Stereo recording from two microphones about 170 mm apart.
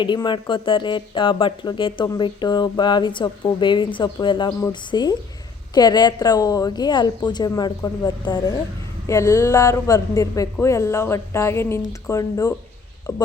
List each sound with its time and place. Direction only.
0.0 s a woman's voice: 25° left (ahead or behind)